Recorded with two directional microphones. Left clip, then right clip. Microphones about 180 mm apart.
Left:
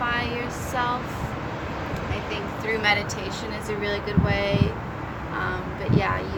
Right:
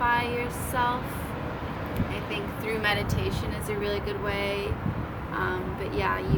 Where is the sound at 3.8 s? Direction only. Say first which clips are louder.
Left 3 dB; 20° right (ahead or behind).